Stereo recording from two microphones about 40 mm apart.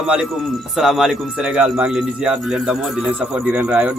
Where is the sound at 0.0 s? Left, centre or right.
Right.